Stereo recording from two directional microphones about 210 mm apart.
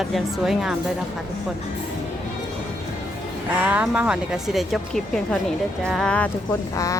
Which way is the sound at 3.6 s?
5° right (ahead or behind).